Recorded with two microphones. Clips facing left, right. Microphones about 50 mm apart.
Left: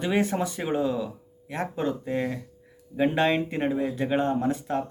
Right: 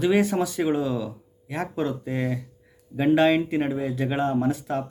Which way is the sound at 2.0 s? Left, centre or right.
Centre.